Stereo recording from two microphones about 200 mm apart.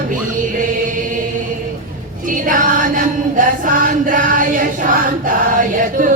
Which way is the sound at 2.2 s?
40° right (ahead or behind).